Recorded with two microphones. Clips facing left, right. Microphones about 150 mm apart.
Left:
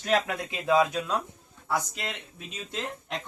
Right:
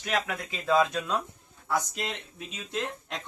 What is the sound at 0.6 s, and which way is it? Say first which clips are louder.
Speech: left 1 dB; 10° left (ahead or behind).